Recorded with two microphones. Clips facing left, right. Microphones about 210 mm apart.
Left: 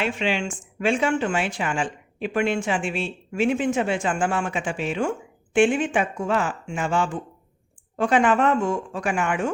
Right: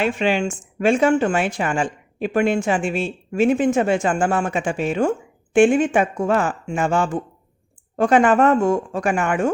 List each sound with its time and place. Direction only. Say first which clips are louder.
0.0 s speech: right 5 dB; 45° right (ahead or behind)